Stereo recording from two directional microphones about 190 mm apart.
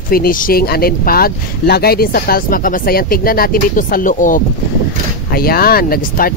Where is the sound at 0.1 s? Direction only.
50° left (ahead or behind).